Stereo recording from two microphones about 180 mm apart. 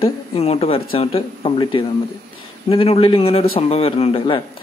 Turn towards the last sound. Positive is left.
turn(degrees=30)  # may be behind; listen again after turning